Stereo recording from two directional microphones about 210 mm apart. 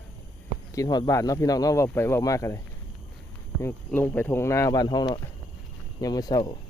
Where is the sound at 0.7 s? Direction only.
20° left (ahead or behind).